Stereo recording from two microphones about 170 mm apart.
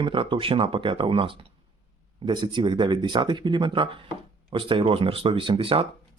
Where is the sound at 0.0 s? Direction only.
30° right (ahead or behind).